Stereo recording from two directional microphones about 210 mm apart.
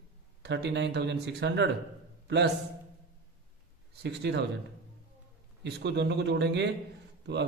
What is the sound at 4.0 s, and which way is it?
Speech, 55° right (ahead or behind).